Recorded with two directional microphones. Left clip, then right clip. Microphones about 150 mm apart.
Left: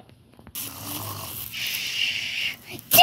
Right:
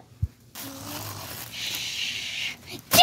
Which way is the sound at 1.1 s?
10° left (ahead or behind).